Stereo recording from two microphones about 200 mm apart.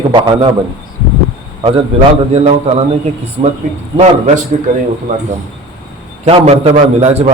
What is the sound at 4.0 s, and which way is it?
Speech, 35° right (ahead or behind).